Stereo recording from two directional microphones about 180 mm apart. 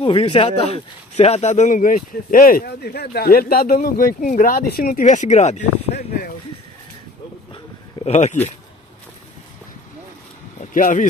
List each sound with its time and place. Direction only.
0.1 s speech: 30° left (ahead or behind)
8.0 s speech: 40° left (ahead or behind)
10.6 s speech: 45° left (ahead or behind)